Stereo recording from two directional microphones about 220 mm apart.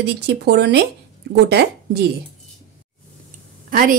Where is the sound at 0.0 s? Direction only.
50° right (ahead or behind).